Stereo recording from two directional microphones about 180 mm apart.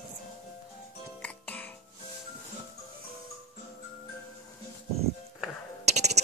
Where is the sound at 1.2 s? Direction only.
10° left (ahead or behind).